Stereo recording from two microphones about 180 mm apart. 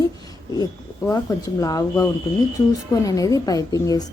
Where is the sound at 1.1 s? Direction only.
20° left (ahead or behind).